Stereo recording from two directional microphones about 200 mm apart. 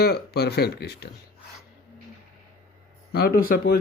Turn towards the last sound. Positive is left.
turn(degrees=50)  # may be behind; listen again after turning